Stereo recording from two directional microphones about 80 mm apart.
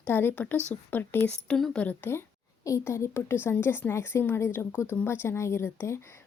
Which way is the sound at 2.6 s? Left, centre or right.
Left.